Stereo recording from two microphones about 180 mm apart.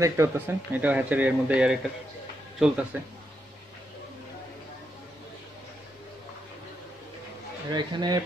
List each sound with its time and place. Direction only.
0.0 s speech: 15° right (ahead or behind)
7.7 s speech: 25° right (ahead or behind)